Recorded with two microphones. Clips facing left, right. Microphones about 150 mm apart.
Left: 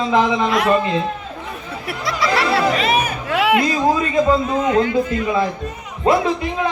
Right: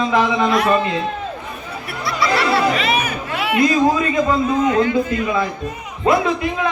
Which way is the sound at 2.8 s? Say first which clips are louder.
Left 1 dB; 45° left (ahead or behind).